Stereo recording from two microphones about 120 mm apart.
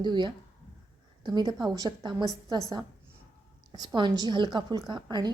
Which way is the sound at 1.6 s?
35° right (ahead or behind).